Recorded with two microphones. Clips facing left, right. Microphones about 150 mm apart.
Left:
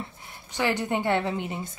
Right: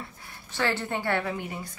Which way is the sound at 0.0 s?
20° left (ahead or behind).